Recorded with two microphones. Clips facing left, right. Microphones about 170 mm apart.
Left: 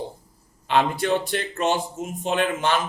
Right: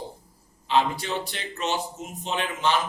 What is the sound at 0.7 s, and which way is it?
A man's voice, 55° left (ahead or behind).